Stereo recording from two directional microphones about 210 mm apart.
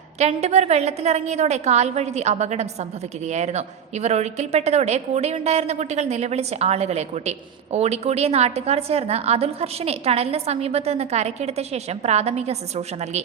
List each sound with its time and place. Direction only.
0.2 s a woman's voice: 30° right (ahead or behind)